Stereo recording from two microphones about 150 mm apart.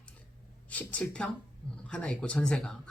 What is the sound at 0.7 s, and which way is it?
Speech, 10° left (ahead or behind).